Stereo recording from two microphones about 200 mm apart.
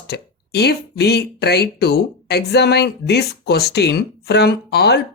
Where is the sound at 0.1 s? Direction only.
55° left (ahead or behind).